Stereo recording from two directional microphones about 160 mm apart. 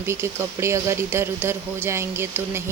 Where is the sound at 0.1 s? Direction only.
15° right (ahead or behind).